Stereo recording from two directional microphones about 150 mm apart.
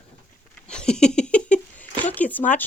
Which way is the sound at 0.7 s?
5° left (ahead or behind).